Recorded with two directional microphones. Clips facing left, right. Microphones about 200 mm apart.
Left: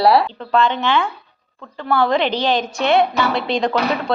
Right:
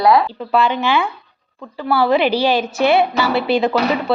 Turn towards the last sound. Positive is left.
turn(degrees=-5)  # may be behind; listen again after turning